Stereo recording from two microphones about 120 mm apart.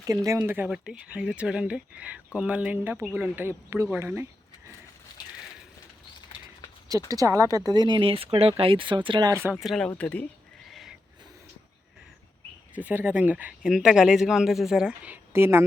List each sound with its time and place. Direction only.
0.3 s speech: 15° right (ahead or behind)
7.1 s speech: 30° right (ahead or behind)
9.3 s speech: 20° right (ahead or behind)
9.6 s speech: centre (ahead or behind)
9.9 s speech: 10° left (ahead or behind)
10.7 s a sound: centre (ahead or behind)
12.7 s speech: 15° right (ahead or behind)